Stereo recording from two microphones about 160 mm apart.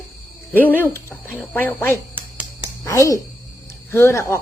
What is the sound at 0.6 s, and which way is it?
Speech, 10° left (ahead or behind).